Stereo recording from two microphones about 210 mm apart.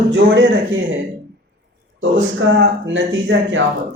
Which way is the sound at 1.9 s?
60° right (ahead or behind).